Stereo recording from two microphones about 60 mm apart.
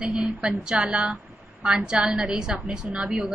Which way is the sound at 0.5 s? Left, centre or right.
Centre.